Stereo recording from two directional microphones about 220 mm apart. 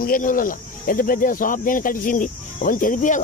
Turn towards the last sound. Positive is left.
turn(degrees=35)  # may be behind; listen again after turning